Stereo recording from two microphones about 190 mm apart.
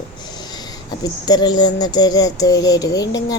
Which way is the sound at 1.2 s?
20° left (ahead or behind).